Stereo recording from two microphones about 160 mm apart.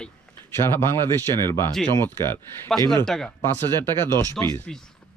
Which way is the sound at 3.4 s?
15° left (ahead or behind).